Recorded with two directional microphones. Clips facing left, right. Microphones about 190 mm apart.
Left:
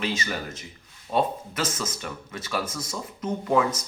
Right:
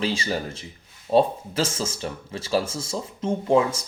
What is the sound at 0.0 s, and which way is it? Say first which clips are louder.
Speech: right 4 dB; 30° right (ahead or behind).